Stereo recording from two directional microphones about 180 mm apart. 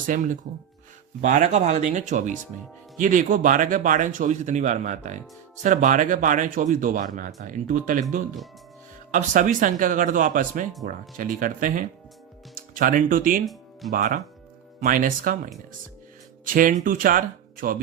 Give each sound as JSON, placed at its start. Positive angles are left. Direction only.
{"t": 0.1, "sound": "speech", "side_deg": -50}
{"t": 9.1, "sound": "speech", "side_deg": -45}
{"t": 13.4, "sound": "music", "side_deg": 0}
{"t": 13.9, "sound": "speech", "side_deg": -50}
{"t": 16.5, "sound": "speech", "side_deg": -50}